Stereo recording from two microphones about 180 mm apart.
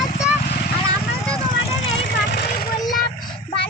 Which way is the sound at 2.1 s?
65° left (ahead or behind).